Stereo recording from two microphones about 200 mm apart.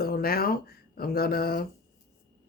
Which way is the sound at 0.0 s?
50° left (ahead or behind).